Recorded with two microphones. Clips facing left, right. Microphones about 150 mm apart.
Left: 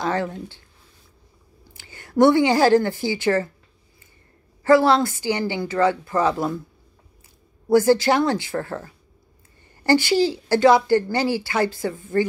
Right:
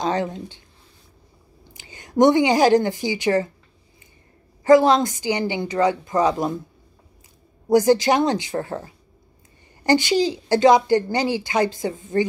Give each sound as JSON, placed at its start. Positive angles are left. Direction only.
{"t": 0.0, "sound": "a woman's voice", "side_deg": -20}
{"t": 4.6, "sound": "a woman's voice", "side_deg": -15}
{"t": 7.7, "sound": "a woman's voice", "side_deg": -15}